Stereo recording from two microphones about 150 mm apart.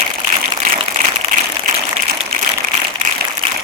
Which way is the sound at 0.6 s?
55° right (ahead or behind).